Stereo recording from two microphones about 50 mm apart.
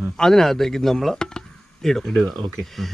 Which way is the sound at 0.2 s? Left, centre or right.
Centre.